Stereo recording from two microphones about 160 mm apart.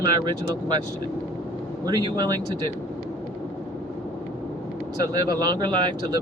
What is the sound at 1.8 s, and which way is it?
Speech, 25° right (ahead or behind).